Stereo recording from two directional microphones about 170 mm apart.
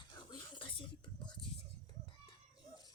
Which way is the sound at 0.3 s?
25° left (ahead or behind).